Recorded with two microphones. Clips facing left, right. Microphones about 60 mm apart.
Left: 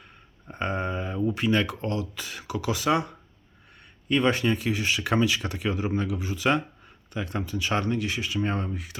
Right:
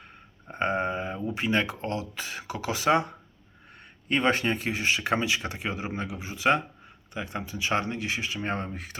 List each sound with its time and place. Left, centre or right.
0.4 s speech: right
4.1 s speech: right